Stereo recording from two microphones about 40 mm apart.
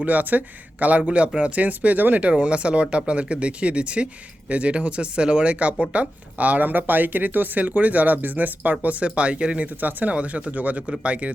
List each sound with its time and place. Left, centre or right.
0.0 s speech: right
1.6 s speech: right
2.4 s speech: right